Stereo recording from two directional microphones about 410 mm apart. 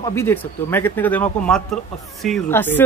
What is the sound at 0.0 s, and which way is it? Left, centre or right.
Speech, centre.